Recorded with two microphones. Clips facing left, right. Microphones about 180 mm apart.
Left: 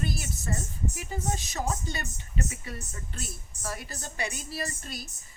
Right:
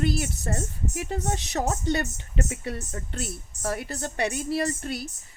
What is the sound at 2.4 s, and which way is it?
Speech, 60° right (ahead or behind).